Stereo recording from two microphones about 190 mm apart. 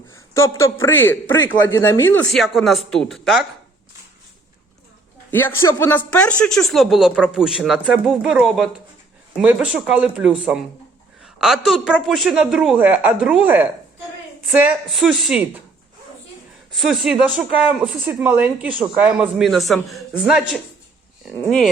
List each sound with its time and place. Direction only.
0.1 s a sound: 15° left (ahead or behind)
0.6 s speech: 15° left (ahead or behind)
2.3 s speech: centre (ahead or behind)
5.5 s a woman's voice: 15° left (ahead or behind); by 15.6 s 5° right (ahead or behind)
16.7 s speech: centre (ahead or behind)